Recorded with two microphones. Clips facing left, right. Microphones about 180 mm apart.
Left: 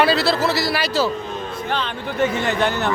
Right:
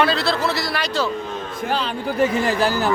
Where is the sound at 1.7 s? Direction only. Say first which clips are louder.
Right 3 dB; 35° right (ahead or behind).